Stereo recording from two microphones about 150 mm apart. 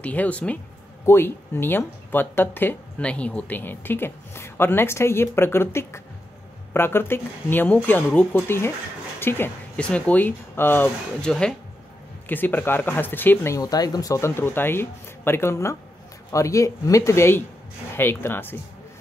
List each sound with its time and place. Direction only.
0.0 s speech: 10° left (ahead or behind)